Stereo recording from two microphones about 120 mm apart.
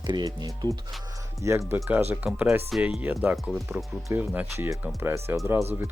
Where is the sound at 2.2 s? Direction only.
10° right (ahead or behind).